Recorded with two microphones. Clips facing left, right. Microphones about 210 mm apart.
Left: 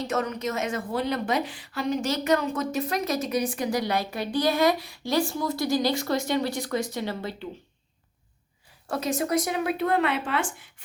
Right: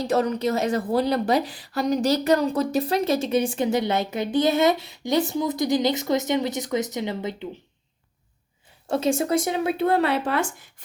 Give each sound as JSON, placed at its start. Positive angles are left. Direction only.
{"t": 0.1, "sound": "a woman's voice", "side_deg": -35}
{"t": 8.9, "sound": "a woman's voice", "side_deg": -25}